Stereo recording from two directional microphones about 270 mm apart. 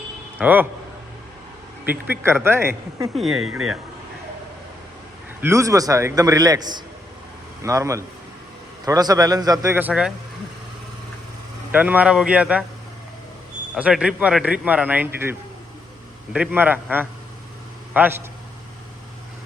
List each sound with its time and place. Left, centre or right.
0.3 s a man's voice: centre
1.8 s speech: centre
3.5 s speech: right
5.4 s speech: centre
11.7 s speech: centre
13.7 s speech: centre